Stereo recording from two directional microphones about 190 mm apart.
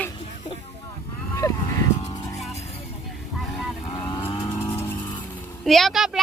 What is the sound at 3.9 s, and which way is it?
Vehicle, 25° left (ahead or behind).